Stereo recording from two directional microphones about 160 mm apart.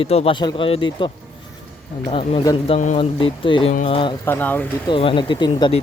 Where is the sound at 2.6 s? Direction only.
45° left (ahead or behind).